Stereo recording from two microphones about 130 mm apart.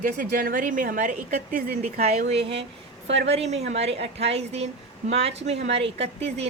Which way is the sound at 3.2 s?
55° right (ahead or behind).